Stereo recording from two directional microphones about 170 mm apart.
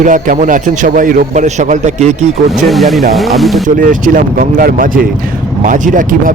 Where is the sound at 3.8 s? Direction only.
55° right (ahead or behind).